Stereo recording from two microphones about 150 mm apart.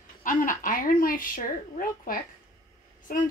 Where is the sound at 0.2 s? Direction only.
65° left (ahead or behind).